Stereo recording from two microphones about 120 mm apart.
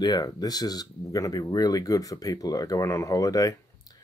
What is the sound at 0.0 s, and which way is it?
Speech, 35° left (ahead or behind).